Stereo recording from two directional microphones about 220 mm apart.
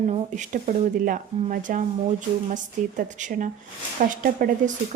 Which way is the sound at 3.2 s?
35° right (ahead or behind).